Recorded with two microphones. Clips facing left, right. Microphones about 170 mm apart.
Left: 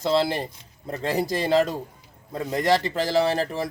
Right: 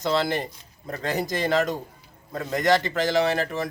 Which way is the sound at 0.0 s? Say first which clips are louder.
Left 2 dB; 30° left (ahead or behind).